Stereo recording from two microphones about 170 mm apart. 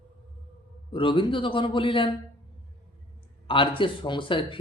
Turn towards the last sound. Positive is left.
turn(degrees=30)  # may be behind; listen again after turning